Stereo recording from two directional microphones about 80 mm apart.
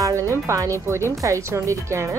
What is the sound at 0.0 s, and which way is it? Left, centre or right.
A woman's voice, right.